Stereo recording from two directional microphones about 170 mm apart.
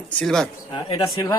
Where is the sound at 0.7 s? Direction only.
20° left (ahead or behind).